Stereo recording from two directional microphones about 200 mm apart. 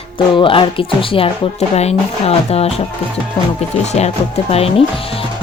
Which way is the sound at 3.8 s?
35° left (ahead or behind).